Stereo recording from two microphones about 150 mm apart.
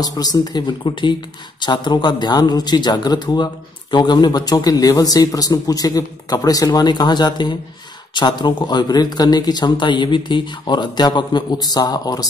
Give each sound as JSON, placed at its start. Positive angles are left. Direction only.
{"t": 0.0, "sound": "speech", "side_deg": 25}